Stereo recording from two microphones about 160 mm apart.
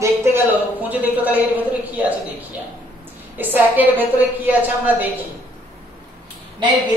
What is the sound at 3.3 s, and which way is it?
A woman's voice, 10° right (ahead or behind).